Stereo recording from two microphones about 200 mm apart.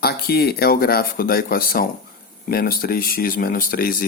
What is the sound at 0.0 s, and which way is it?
Speech, 50° left (ahead or behind).